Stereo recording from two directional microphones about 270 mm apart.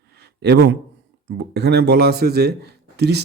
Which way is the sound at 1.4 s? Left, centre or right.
Right.